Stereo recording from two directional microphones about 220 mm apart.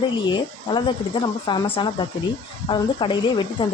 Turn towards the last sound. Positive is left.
turn(degrees=20)  # may be behind; listen again after turning